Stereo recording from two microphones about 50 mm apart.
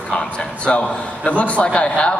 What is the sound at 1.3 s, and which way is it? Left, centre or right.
Speech, left.